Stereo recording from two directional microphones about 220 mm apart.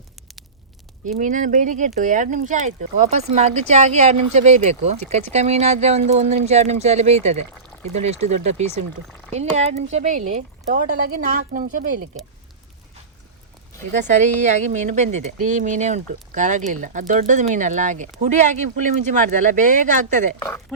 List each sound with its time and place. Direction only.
1.0 s speech: 35° right (ahead or behind)
13.9 s speech: 35° right (ahead or behind)
20.4 s speech: 10° left (ahead or behind)